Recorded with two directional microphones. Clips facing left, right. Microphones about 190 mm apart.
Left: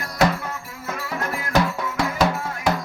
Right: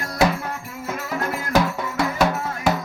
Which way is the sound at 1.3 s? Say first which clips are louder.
Right 1 dB; 5° right (ahead or behind).